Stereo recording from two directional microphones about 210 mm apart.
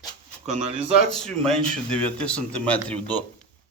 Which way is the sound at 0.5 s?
30° right (ahead or behind).